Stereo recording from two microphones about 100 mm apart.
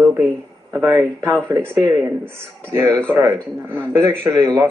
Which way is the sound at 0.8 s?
35° right (ahead or behind).